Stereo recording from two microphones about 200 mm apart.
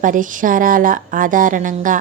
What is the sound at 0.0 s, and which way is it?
Speech, 40° right (ahead or behind).